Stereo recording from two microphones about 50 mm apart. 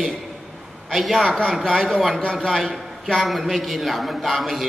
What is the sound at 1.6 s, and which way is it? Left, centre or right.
Speech, centre.